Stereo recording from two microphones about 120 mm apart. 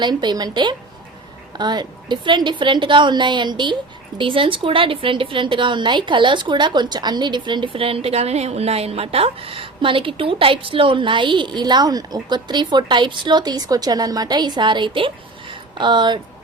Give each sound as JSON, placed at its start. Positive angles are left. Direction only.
{"t": 0.0, "sound": "a woman's voice", "side_deg": -40}